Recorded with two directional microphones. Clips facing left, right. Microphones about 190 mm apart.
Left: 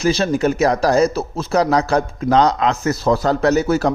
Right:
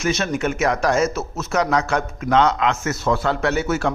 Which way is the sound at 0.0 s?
30° left (ahead or behind).